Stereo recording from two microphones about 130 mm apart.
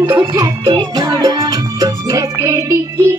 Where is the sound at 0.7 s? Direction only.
35° right (ahead or behind).